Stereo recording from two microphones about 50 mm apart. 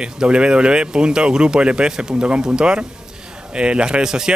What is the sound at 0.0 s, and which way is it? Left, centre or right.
Speech, centre.